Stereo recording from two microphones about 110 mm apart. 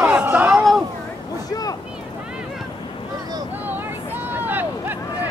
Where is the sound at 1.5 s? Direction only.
35° left (ahead or behind).